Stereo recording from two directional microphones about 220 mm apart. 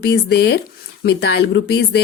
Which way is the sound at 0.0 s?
50° left (ahead or behind).